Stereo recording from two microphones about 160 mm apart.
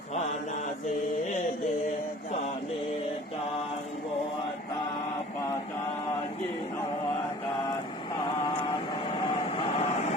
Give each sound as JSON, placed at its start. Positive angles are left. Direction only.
{"t": 9.0, "sound": "train", "side_deg": 35}